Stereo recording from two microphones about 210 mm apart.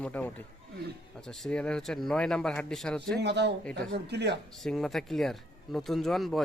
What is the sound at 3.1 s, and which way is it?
Speech, 55° right (ahead or behind).